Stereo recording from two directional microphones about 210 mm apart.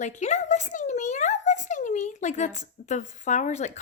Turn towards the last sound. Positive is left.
turn(degrees=35)  # may be behind; listen again after turning